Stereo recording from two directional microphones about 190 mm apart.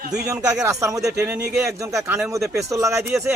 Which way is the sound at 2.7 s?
15° right (ahead or behind).